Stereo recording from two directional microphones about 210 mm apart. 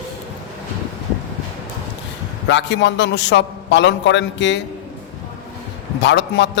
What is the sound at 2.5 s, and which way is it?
A man's voice, 60° left (ahead or behind).